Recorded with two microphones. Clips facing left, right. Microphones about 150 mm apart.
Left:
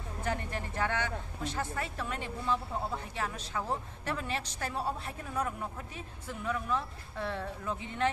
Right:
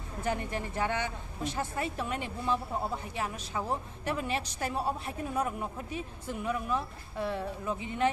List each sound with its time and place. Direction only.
0.2 s speech: 15° right (ahead or behind)